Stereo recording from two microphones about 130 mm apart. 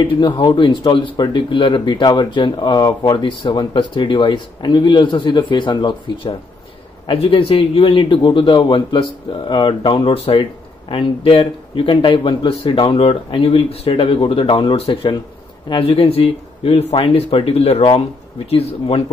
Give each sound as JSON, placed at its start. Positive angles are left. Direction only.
{"t": 0.0, "sound": "a man's voice", "side_deg": 40}